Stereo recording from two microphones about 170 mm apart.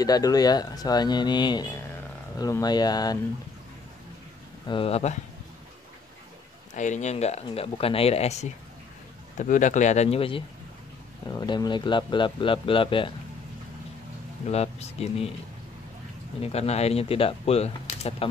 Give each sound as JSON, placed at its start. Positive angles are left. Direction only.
{"t": 0.0, "sound": "speech", "side_deg": 20}
{"t": 4.6, "sound": "speech", "side_deg": 30}
{"t": 6.7, "sound": "speech", "side_deg": 45}
{"t": 14.5, "sound": "speech", "side_deg": 40}
{"t": 16.3, "sound": "speech", "side_deg": 40}